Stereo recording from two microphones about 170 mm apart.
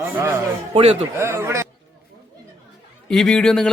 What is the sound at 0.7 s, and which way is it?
Speech, 35° right (ahead or behind).